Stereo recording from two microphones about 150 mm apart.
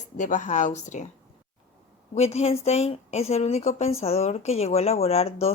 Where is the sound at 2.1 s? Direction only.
45° left (ahead or behind).